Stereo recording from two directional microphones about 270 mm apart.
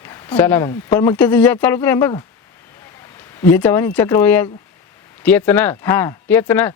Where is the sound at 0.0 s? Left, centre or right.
Centre.